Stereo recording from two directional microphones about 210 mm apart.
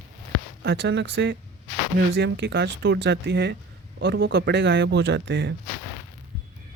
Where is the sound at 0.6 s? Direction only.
55° right (ahead or behind).